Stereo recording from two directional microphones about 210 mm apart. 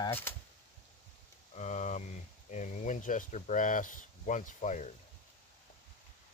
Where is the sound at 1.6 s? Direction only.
35° left (ahead or behind).